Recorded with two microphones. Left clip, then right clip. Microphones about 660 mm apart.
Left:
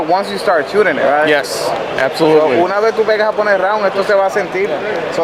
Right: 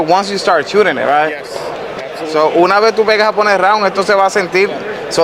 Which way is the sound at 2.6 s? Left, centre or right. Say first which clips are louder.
Right 3 dB; right.